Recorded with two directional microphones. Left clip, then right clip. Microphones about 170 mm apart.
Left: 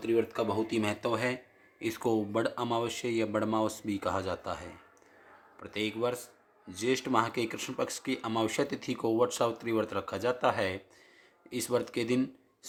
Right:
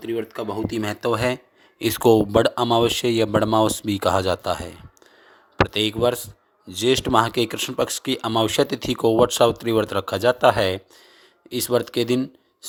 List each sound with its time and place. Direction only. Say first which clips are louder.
0.0 s speech: right 2 dB; 25° right (ahead or behind); by 12.2 s 45° right (ahead or behind)